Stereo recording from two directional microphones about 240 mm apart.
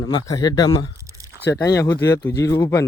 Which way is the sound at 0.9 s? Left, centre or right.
Centre.